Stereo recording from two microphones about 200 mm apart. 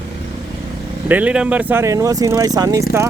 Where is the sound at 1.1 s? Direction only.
5° right (ahead or behind).